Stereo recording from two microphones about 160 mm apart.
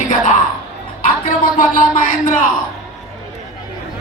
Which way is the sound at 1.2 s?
55° left (ahead or behind).